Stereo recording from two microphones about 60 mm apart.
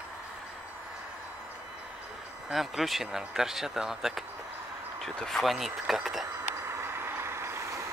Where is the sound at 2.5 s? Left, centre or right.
Centre.